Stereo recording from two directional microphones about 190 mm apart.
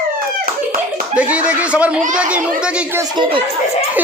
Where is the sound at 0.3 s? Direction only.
50° right (ahead or behind).